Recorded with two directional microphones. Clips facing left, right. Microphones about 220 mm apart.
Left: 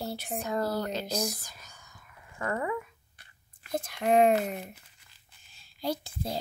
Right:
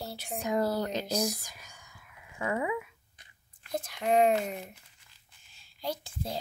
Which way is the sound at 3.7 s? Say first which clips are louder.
Left 2 dB; 50° left (ahead or behind).